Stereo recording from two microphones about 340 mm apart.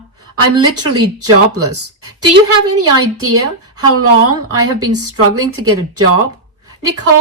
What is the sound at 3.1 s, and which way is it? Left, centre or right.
A woman's voice, right.